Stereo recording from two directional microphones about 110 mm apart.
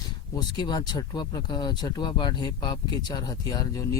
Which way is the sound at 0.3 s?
40° left (ahead or behind).